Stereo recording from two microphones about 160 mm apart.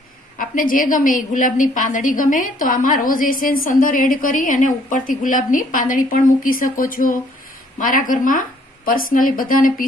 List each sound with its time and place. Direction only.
0.4 s a woman's voice: 60° left (ahead or behind)